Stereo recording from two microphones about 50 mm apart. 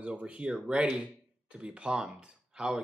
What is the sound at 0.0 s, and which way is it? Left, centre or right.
Speech, right.